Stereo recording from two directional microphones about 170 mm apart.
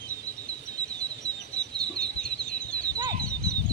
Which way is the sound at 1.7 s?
5° left (ahead or behind).